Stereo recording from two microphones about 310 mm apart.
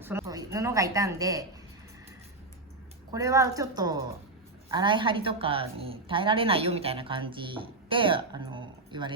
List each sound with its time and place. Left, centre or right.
0.0 s a woman's voice: centre
3.1 s a woman's voice: centre